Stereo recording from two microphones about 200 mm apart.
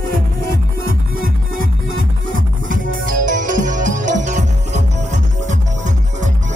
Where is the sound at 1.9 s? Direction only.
80° right.